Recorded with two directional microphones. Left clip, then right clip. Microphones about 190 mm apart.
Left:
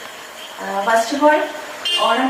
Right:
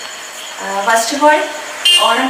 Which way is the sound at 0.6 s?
20° left (ahead or behind).